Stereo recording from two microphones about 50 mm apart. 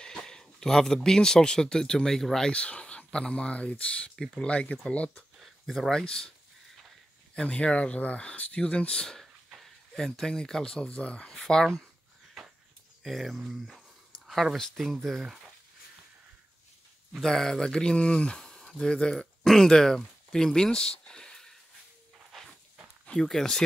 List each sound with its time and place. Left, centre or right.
0.0 s speech: centre
2.5 s speech: left
5.4 s speech: centre
7.3 s speech: left
9.2 s a sound: centre
9.9 s speech: centre
11.3 s speech: centre
13.0 s speech: centre
17.1 s speech: centre
23.2 s speech: centre